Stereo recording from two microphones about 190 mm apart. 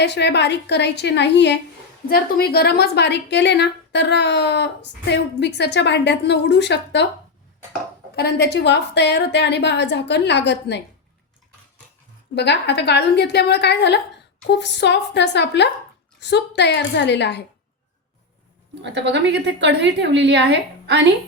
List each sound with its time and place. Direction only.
0.0 s a woman's voice: 60° left (ahead or behind)
2.0 s a woman's voice: 55° left (ahead or behind)
8.1 s a woman's voice: 60° left (ahead or behind)
12.3 s a woman's voice: 65° left (ahead or behind)
18.7 s a woman's voice: 65° right (ahead or behind)